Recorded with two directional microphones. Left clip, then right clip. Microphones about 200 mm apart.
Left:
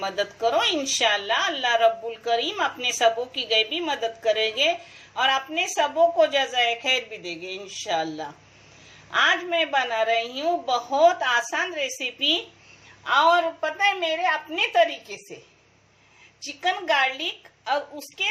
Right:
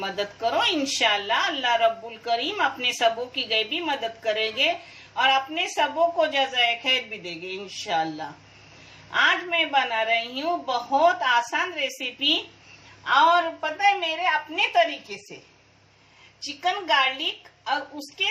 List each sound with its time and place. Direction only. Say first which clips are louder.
0.0 s a woman's voice: left 2 dB; 25° left (ahead or behind)
16.4 s a woman's voice: even; 30° left (ahead or behind)